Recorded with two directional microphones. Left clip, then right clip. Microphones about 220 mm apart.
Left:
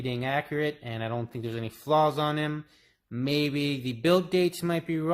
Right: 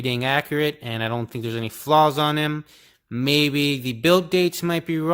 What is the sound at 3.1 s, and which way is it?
Mantra, 35° right (ahead or behind).